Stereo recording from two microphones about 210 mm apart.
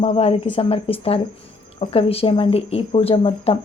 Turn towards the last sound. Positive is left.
turn(degrees=30)  # may be behind; listen again after turning